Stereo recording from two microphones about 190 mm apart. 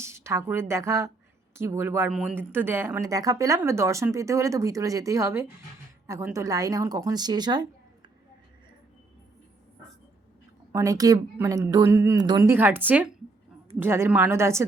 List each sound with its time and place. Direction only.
0.0 s a woman's voice: 15° right (ahead or behind)
10.7 s speech: 15° right (ahead or behind)